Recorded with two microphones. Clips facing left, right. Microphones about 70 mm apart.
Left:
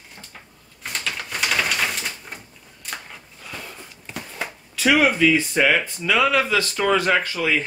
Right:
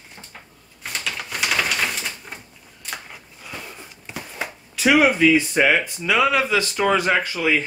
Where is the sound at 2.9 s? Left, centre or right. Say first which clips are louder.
Even; centre.